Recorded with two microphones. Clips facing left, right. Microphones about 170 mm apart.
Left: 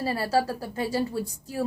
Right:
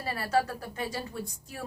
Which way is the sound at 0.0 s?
30° left (ahead or behind).